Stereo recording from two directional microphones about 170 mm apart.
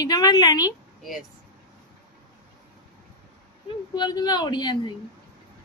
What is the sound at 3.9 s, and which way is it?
Speech, 25° left (ahead or behind).